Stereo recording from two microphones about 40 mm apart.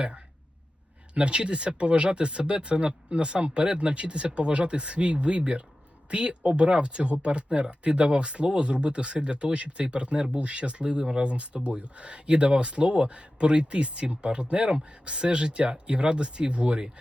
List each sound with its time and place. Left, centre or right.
1.1 s speech: right